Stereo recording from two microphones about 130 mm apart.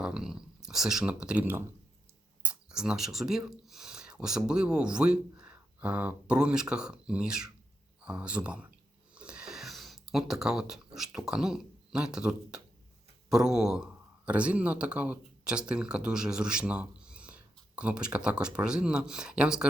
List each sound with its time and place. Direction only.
0.0 s speech: 5° right (ahead or behind)